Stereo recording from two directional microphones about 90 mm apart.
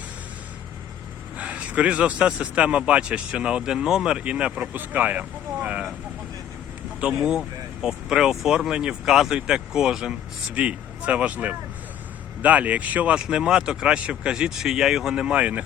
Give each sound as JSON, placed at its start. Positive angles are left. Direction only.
{"t": 1.4, "sound": "a man's voice", "side_deg": -15}
{"t": 7.3, "sound": "a man's voice", "side_deg": -5}